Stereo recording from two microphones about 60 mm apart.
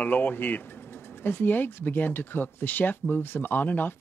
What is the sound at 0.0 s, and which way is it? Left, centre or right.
Speech, left.